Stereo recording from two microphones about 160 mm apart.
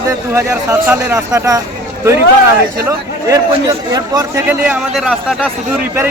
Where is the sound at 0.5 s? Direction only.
15° right (ahead or behind).